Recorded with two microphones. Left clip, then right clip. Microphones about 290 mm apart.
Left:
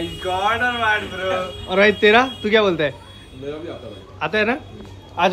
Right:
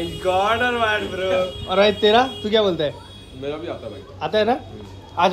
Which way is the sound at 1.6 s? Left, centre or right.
Centre.